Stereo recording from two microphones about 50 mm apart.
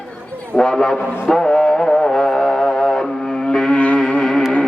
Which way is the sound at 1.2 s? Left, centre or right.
Centre.